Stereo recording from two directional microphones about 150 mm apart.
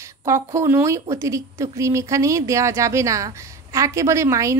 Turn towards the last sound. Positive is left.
turn(degrees=-20)  # may be behind; listen again after turning